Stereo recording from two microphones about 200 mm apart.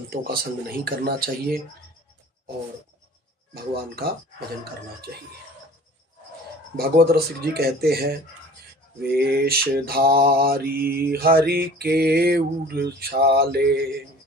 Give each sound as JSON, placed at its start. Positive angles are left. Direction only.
{"t": 0.1, "sound": "mantra", "side_deg": -50}
{"t": 3.5, "sound": "mantra", "side_deg": -50}
{"t": 6.7, "sound": "mantra", "side_deg": -50}